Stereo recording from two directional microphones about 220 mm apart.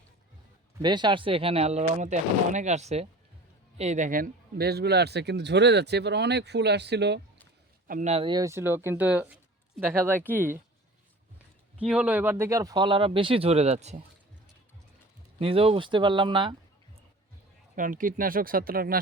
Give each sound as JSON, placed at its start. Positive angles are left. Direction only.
{"t": 0.8, "sound": "a man's voice", "side_deg": -20}
{"t": 7.9, "sound": "speech", "side_deg": -35}
{"t": 11.8, "sound": "speech", "side_deg": -5}
{"t": 15.4, "sound": "speech", "side_deg": -25}
{"t": 17.7, "sound": "speech", "side_deg": -35}